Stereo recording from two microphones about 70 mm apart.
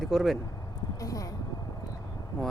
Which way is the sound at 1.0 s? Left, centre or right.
Left.